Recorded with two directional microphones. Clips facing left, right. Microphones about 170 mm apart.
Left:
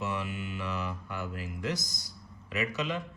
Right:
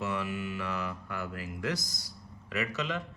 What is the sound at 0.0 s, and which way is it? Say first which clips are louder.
Speech: right 1 dB; 20° left (ahead or behind).